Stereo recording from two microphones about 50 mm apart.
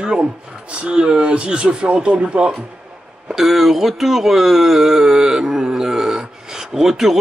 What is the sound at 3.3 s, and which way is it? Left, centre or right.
Speech, centre.